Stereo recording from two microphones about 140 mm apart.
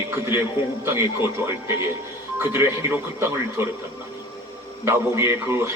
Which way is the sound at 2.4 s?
15° right (ahead or behind).